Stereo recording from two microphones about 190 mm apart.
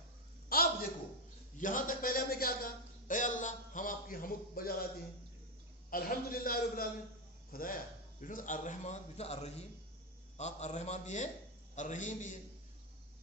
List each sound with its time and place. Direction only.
0.4 s a sound: 50° left (ahead or behind)
1.5 s a man's voice: 45° left (ahead or behind)
5.9 s a man's voice: 50° left (ahead or behind)